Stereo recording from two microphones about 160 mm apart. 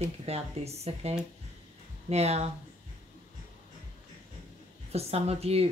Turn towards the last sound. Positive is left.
turn(degrees=-40)  # may be behind; listen again after turning